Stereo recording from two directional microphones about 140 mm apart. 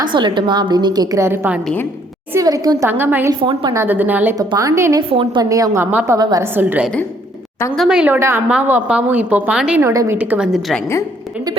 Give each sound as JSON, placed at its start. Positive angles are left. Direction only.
{"t": 0.1, "sound": "a woman's voice", "side_deg": -35}
{"t": 3.0, "sound": "a woman's voice", "side_deg": -15}
{"t": 3.4, "sound": "a woman's voice", "side_deg": -35}
{"t": 3.8, "sound": "a woman's voice", "side_deg": -15}
{"t": 4.4, "sound": "a woman's voice", "side_deg": -25}
{"t": 5.0, "sound": "a woman's voice", "side_deg": -40}
{"t": 6.1, "sound": "a woman's voice", "side_deg": -25}
{"t": 6.5, "sound": "a woman's voice", "side_deg": -15}
{"t": 9.8, "sound": "a woman's voice", "side_deg": -20}
{"t": 10.2, "sound": "a woman's voice", "side_deg": -10}